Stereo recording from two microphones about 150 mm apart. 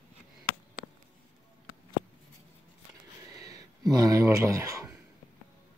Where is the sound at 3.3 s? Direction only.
25° right (ahead or behind).